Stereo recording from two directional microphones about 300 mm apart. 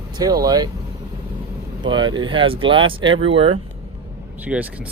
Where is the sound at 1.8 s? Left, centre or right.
Centre.